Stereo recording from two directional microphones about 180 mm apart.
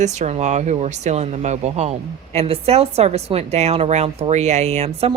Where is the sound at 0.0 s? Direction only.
40° right (ahead or behind).